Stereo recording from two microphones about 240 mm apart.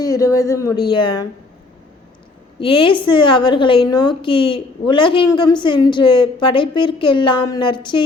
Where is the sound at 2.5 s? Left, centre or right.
Left.